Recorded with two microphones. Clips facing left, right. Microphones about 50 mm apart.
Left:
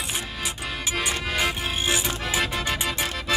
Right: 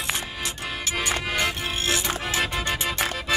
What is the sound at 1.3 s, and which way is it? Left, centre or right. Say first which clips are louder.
Music: even; centre.